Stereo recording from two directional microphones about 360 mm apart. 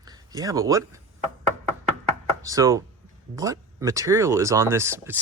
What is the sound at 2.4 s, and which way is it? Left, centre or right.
Speech, centre.